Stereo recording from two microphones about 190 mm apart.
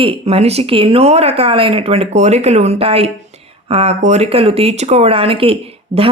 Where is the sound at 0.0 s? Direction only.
30° right (ahead or behind).